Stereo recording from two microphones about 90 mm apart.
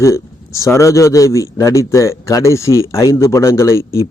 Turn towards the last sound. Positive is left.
turn(degrees=30)  # may be behind; listen again after turning